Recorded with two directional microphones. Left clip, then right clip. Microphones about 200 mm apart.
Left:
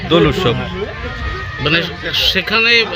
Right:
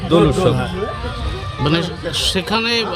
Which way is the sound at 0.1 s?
5° left (ahead or behind).